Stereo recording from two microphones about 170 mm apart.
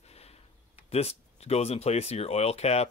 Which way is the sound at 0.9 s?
35° left (ahead or behind).